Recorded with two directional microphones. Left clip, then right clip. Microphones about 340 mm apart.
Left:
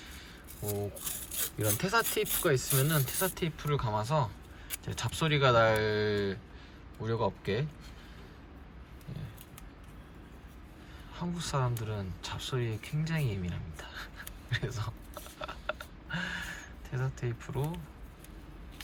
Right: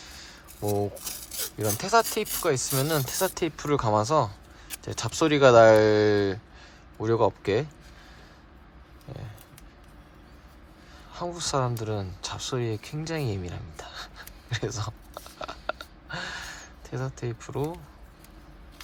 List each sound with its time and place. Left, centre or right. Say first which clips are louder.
0.0 s a sound: right 4 dB; centre
1.5 s speech: right 7 dB; centre
11.1 s speech: right 8 dB; centre